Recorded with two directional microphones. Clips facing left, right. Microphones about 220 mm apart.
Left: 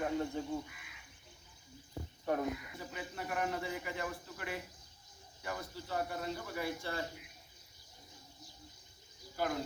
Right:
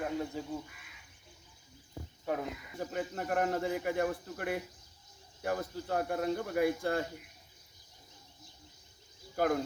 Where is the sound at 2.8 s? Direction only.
50° right (ahead or behind).